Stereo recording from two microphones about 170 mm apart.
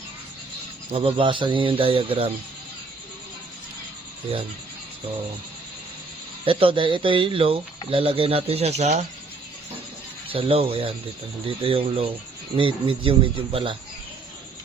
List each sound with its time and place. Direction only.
0.9 s speech: 35° right (ahead or behind)
6.4 s speech: 30° right (ahead or behind)
10.2 s speech: 35° right (ahead or behind)